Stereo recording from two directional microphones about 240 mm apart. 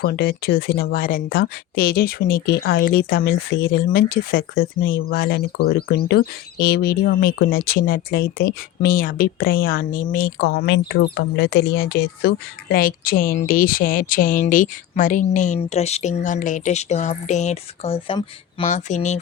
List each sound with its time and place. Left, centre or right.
0.0 s speech: left